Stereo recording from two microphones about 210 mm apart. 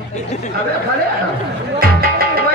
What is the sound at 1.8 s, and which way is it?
Music, 45° right (ahead or behind).